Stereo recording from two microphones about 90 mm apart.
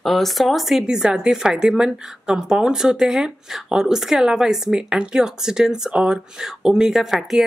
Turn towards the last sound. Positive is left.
turn(degrees=-5)  # may be behind; listen again after turning